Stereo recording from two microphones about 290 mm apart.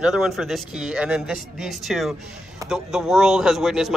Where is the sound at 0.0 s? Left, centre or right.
Centre.